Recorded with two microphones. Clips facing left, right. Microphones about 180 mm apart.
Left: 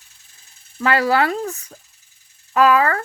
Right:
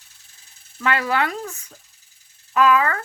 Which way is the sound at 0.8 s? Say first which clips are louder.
Left 4 dB; 35° left (ahead or behind).